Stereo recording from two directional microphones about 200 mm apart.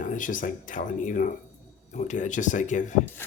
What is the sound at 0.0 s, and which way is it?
Speech, 40° left (ahead or behind).